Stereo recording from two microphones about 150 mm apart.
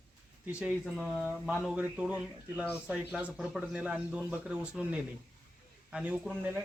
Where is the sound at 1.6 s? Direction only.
5° right (ahead or behind).